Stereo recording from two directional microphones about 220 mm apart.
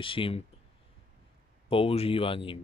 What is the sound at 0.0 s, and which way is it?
Speech, 25° left (ahead or behind).